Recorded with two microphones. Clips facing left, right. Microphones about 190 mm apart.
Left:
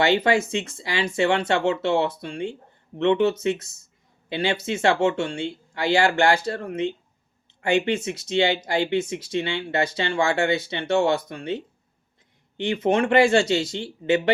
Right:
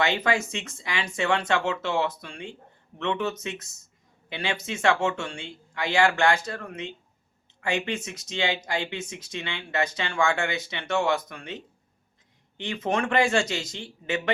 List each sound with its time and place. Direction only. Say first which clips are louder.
0.0 s speech: left 5 dB; 30° left (ahead or behind)